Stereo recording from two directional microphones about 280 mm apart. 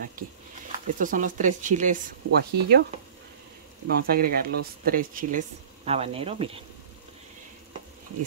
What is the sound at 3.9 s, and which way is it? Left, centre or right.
Speech, right.